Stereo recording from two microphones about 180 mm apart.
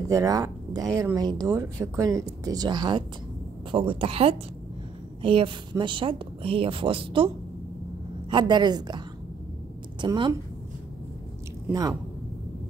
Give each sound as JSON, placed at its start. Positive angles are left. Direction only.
{"t": 0.1, "sound": "a woman's voice", "side_deg": -20}
{"t": 8.3, "sound": "speech", "side_deg": -25}
{"t": 10.0, "sound": "speech", "side_deg": -25}